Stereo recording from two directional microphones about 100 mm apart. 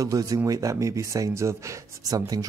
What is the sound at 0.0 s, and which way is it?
Speech, 35° right (ahead or behind).